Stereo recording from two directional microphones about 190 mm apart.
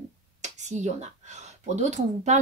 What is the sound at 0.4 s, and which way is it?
Speech, 40° right (ahead or behind).